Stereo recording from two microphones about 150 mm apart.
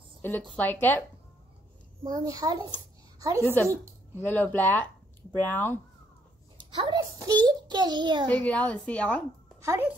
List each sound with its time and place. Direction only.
0.2 s a woman's voice: 15° left (ahead or behind)
2.0 s a child's voice: 25° right (ahead or behind)
4.2 s a woman's voice: 10° left (ahead or behind)
6.7 s a child's voice: 30° right (ahead or behind)
8.3 s a woman's voice: 10° left (ahead or behind)
9.7 s speech: 15° right (ahead or behind)